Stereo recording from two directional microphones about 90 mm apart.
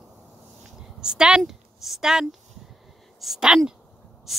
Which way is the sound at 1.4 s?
5° right (ahead or behind).